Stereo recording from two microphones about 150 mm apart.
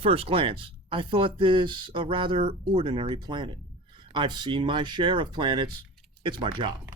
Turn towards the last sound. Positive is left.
turn(degrees=-35)  # may be behind; listen again after turning